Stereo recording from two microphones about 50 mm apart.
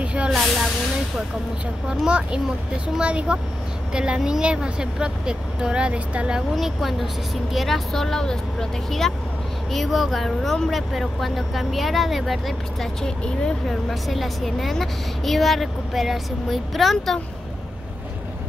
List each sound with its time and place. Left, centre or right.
0.0 s vehicle: right
0.3 s vehicle: centre
2.0 s speech: centre
6.5 s a woman's voice: centre